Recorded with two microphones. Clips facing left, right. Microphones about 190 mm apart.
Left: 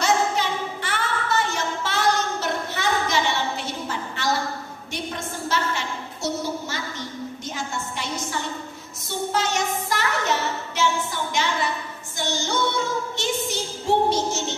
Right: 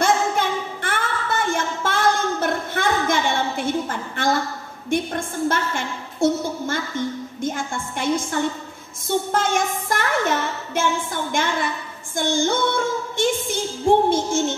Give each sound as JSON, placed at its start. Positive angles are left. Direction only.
{"t": 0.0, "sound": "a sound", "side_deg": -50}
{"t": 9.3, "sound": "music", "side_deg": -50}
{"t": 12.2, "sound": "female singing", "side_deg": -50}